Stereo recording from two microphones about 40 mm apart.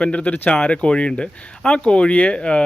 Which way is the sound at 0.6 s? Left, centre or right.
Left.